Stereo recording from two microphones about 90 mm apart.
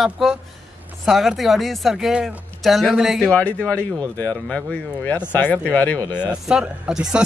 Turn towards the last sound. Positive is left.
turn(degrees=-10)  # may be behind; listen again after turning